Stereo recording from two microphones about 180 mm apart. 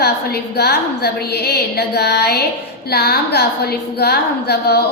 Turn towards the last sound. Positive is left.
turn(degrees=60)  # may be behind; listen again after turning